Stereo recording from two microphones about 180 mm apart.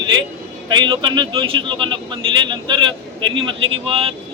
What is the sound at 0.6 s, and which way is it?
Speech, 25° right (ahead or behind).